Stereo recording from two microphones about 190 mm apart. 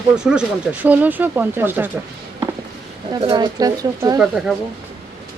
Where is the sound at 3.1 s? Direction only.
20° right (ahead or behind); by 4.6 s 5° right (ahead or behind).